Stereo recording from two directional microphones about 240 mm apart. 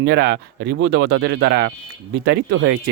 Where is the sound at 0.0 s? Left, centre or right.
Right.